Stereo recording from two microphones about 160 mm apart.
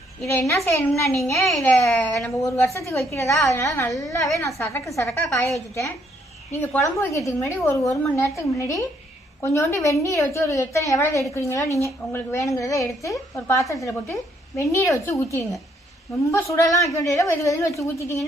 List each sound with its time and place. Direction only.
0.3 s a woman's voice: 15° left (ahead or behind)
1.1 s a child's voice: centre (ahead or behind)
1.6 s a woman's voice: 10° left (ahead or behind)